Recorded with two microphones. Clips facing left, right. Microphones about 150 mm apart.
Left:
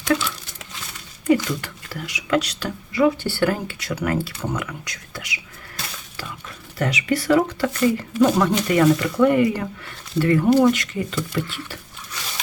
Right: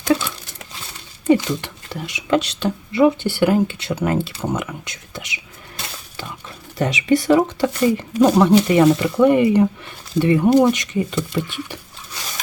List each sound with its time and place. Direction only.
0.9 s speech: 25° right (ahead or behind)